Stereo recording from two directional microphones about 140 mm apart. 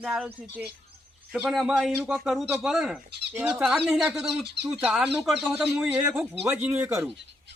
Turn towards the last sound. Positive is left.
turn(degrees=-10)  # may be behind; listen again after turning